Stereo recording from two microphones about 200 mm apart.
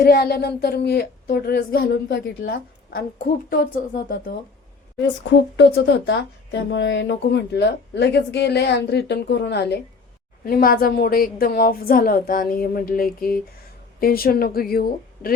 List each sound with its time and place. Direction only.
0.0 s speech: 50° left (ahead or behind)
5.5 s a woman's voice: 60° left (ahead or behind)